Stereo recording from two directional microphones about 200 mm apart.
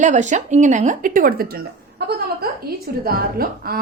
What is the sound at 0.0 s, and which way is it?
A woman's voice, 40° right (ahead or behind).